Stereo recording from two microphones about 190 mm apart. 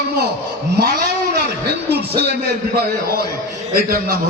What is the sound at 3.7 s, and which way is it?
Speech, 50° right (ahead or behind).